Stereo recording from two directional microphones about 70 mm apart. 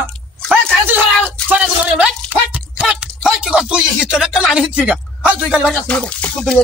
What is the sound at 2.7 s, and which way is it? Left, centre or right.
Speech, centre.